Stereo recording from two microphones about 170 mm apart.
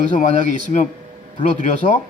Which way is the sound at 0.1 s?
45° left (ahead or behind).